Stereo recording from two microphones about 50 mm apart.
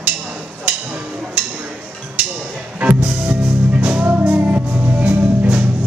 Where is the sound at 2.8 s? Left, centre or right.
Right.